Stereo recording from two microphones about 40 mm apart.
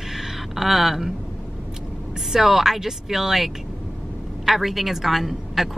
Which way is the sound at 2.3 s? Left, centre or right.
Centre.